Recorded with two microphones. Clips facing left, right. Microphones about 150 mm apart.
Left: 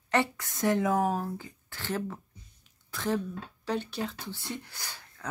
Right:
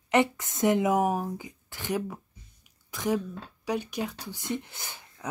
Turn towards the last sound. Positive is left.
turn(degrees=-20)  # may be behind; listen again after turning